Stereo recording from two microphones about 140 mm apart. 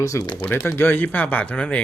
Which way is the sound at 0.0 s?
20° left (ahead or behind).